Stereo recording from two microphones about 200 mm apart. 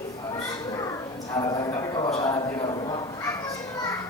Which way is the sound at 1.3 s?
20° left (ahead or behind).